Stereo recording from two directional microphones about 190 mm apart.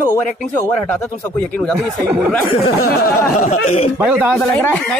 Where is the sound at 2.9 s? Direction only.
50° left (ahead or behind).